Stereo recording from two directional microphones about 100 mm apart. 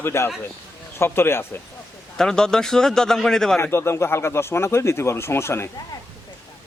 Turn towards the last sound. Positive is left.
turn(degrees=25)  # may be behind; listen again after turning